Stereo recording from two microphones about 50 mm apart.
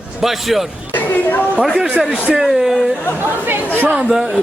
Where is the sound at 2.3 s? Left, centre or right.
Centre.